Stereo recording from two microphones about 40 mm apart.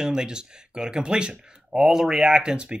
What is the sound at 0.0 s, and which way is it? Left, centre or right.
Speech, centre.